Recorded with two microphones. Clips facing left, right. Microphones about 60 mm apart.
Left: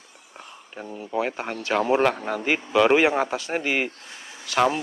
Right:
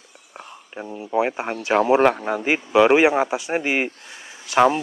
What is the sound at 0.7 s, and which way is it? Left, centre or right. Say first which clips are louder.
Speech: right 5 dB; centre.